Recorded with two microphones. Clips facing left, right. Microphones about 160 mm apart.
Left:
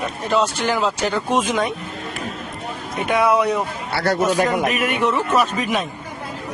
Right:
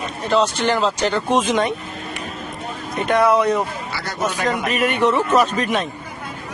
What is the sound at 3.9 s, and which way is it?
Speech, 65° left (ahead or behind).